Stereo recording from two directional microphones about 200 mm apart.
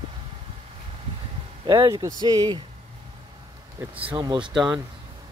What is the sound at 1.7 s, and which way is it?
Speech, 20° right (ahead or behind).